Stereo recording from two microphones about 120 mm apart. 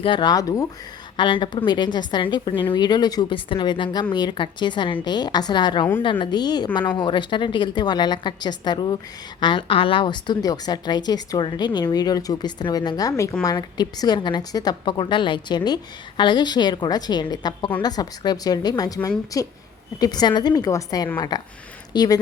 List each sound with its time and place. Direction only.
0.0 s a woman's voice: 40° left (ahead or behind)
1.1 s a woman's voice: 45° left (ahead or behind)